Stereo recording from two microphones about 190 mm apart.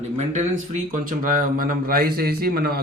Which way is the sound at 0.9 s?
45° right (ahead or behind).